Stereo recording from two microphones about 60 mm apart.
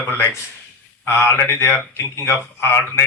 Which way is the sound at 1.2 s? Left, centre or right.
Left.